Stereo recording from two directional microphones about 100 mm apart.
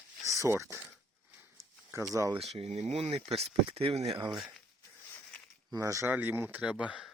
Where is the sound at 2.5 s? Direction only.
90° right.